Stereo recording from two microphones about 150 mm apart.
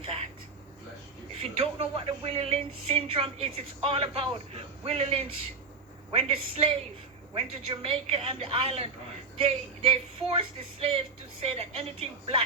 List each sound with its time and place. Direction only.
1.4 s a woman's voice: 40° right (ahead or behind)